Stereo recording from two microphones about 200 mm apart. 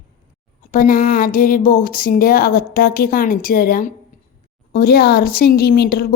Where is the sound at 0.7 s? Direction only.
45° left (ahead or behind).